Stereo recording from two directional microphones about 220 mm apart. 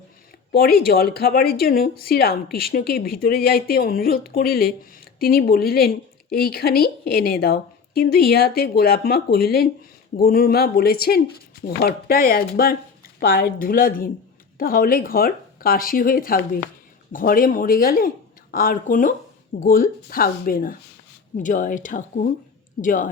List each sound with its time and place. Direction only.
0.5 s speech: 45° left (ahead or behind)